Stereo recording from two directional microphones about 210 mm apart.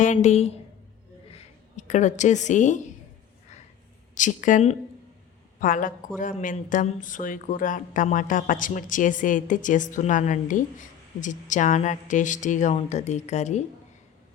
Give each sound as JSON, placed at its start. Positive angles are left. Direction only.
{"t": 0.0, "sound": "speech", "side_deg": 35}
{"t": 1.3, "sound": "a sound", "side_deg": 30}
{"t": 4.1, "sound": "a woman's voice", "side_deg": 35}